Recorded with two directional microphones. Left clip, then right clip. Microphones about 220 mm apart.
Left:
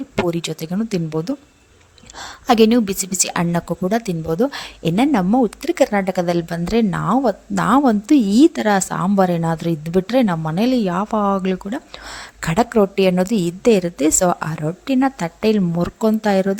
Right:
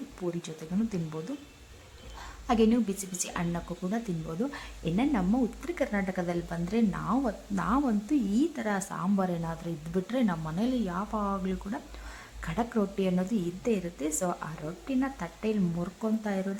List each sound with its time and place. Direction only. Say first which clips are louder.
0.3 s a woman's voice: left 13 dB; 40° left (ahead or behind)